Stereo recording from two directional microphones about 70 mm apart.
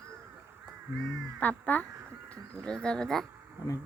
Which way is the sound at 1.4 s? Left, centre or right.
Left.